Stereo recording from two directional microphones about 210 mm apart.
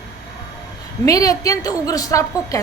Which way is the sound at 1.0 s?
15° left (ahead or behind).